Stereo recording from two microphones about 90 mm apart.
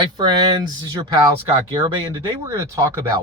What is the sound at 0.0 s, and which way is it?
Speech, 55° right (ahead or behind).